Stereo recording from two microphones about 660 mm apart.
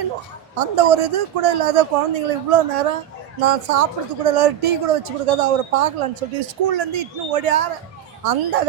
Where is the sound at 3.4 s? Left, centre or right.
Right.